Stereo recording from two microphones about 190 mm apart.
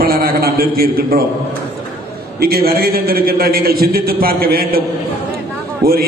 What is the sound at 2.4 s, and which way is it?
A man's voice, 55° right (ahead or behind).